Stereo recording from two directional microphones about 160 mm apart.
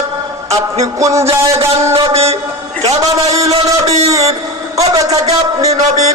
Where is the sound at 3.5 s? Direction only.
40° right (ahead or behind).